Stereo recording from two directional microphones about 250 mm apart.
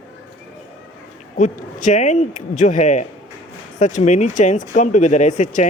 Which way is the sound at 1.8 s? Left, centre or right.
Left.